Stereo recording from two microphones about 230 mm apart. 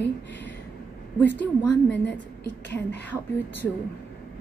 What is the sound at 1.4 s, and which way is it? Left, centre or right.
A woman's voice, centre.